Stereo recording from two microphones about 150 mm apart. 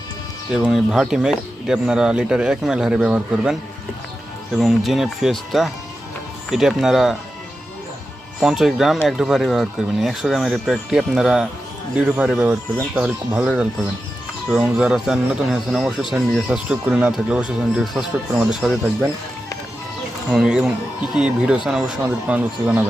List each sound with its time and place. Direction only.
0.5 s speech: 5° right (ahead or behind)
8.4 s speech: centre (ahead or behind)
20.3 s speech: 5° right (ahead or behind)